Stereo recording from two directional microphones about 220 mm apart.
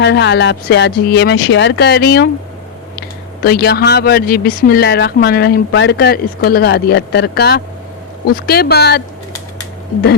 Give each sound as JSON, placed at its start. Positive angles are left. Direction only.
{"t": 0.0, "sound": "speech", "side_deg": 50}
{"t": 3.4, "sound": "speech", "side_deg": 45}